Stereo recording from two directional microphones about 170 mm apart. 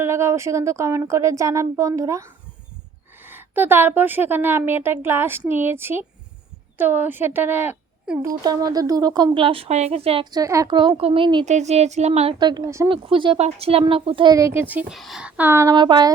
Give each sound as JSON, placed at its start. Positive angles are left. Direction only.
{"t": 0.0, "sound": "a woman's voice", "side_deg": -15}
{"t": 8.2, "sound": "speech", "side_deg": -20}
{"t": 10.3, "sound": "speech", "side_deg": -20}
{"t": 11.4, "sound": "a woman's voice", "side_deg": -45}
{"t": 12.9, "sound": "speech", "side_deg": -30}